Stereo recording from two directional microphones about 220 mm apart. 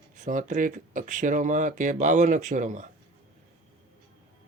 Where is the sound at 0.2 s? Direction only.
35° right (ahead or behind).